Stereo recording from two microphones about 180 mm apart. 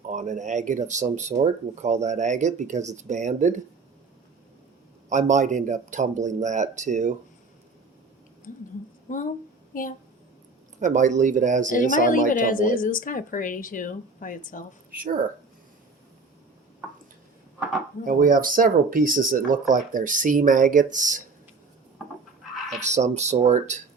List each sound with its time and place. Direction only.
0.1 s speech: 45° right (ahead or behind)
5.0 s speech: 40° right (ahead or behind)
8.5 s speech: 45° left (ahead or behind)
10.8 s speech: 45° right (ahead or behind)
11.7 s speech: 45° left (ahead or behind)
14.8 s speech: 50° right (ahead or behind)
18.0 s speech: 50° right (ahead or behind)
22.8 s speech: 40° right (ahead or behind)